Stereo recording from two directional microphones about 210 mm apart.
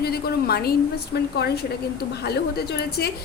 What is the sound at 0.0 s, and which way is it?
A woman's voice, 50° left (ahead or behind).